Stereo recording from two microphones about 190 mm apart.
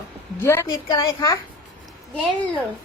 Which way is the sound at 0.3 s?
15° left (ahead or behind).